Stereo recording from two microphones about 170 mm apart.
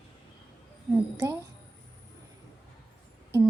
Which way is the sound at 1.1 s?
15° right (ahead or behind).